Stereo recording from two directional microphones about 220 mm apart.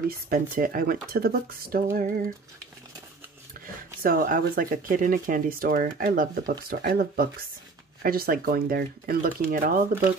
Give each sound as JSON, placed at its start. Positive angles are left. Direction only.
{"t": 0.1, "sound": "speech", "side_deg": -40}
{"t": 3.6, "sound": "speech", "side_deg": -40}